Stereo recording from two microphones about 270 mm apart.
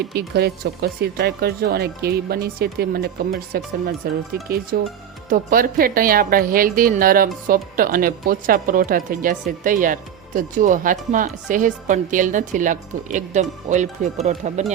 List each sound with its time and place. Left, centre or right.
0.1 s a woman's voice: right